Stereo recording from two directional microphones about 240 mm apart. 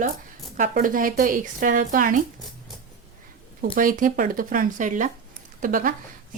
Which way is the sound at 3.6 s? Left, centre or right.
Right.